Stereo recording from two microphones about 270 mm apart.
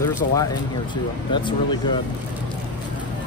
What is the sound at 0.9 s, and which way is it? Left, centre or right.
Speech, centre.